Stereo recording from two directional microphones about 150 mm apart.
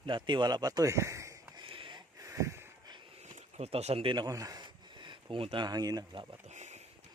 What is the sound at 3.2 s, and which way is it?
Speech, 50° right (ahead or behind).